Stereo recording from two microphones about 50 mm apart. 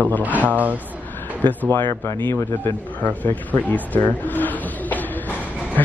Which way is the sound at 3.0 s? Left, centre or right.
Left.